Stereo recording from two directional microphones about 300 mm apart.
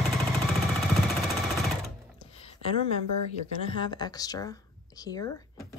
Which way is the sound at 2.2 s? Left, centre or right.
Centre.